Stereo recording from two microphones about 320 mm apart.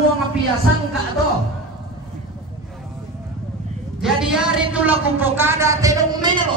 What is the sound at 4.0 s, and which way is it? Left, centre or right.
A woman's voice, centre.